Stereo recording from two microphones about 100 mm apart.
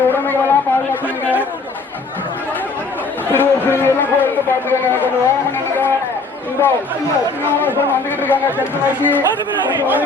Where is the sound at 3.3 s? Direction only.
20° left (ahead or behind).